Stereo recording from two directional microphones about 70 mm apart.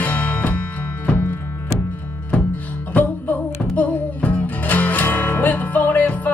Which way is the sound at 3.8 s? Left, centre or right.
Left.